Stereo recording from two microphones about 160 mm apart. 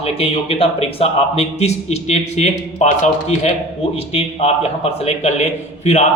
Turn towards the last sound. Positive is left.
turn(degrees=45)  # may be behind; listen again after turning